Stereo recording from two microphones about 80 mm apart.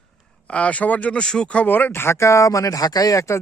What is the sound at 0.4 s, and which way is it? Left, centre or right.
A man's voice, centre.